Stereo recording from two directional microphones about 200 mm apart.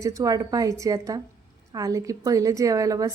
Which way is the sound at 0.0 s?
15° right (ahead or behind).